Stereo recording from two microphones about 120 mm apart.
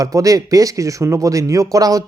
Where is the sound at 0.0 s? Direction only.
30° right (ahead or behind).